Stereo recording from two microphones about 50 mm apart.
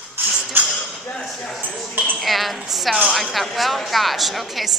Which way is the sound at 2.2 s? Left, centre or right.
Centre.